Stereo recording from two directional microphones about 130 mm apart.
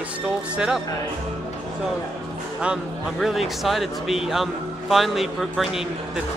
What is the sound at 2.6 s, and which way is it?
Speech, 5° right (ahead or behind).